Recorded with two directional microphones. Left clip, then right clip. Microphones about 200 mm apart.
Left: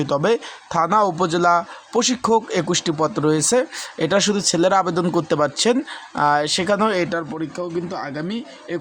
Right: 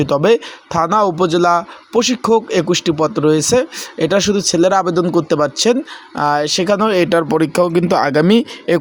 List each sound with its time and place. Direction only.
0.0 s speech: 15° right (ahead or behind)
7.1 s speech: 40° right (ahead or behind)
7.3 s speech: 55° right (ahead or behind)